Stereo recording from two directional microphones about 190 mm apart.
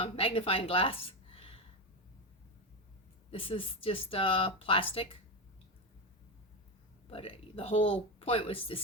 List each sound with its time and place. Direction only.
0.0 s a woman's voice: 30° left (ahead or behind)
3.3 s speech: 30° left (ahead or behind)
7.1 s speech: 30° left (ahead or behind)